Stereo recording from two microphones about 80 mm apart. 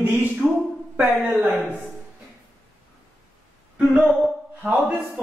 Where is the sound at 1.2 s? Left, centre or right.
Centre.